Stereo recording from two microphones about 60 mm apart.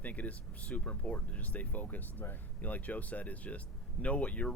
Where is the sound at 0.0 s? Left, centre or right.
Left.